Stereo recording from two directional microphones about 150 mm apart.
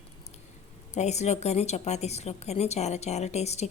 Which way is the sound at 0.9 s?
50° left (ahead or behind).